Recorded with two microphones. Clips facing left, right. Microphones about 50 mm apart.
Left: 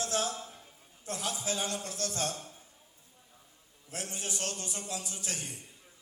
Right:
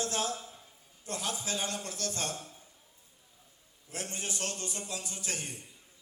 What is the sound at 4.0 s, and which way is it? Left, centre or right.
A man's voice, right.